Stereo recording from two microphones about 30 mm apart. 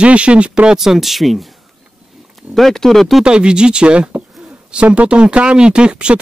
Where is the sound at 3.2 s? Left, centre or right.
Right.